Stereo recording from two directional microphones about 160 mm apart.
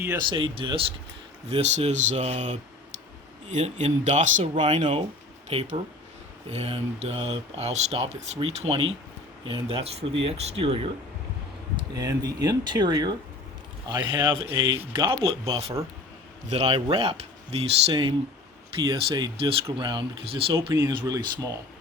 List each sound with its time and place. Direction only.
0.2 s speech: 30° right (ahead or behind)
1.5 s speech: 40° right (ahead or behind)
4.5 s speech: 35° right (ahead or behind)
11.9 s speech: 25° right (ahead or behind)